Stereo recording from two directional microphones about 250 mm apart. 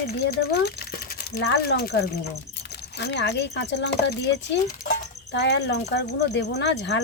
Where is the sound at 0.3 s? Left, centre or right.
Left.